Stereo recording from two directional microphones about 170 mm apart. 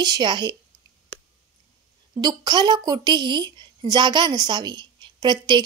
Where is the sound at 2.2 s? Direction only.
25° right (ahead or behind).